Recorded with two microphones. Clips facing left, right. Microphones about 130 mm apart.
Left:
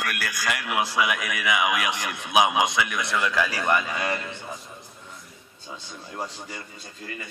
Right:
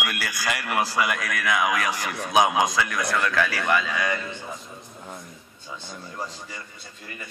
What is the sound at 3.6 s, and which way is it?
Speech, 25° left (ahead or behind).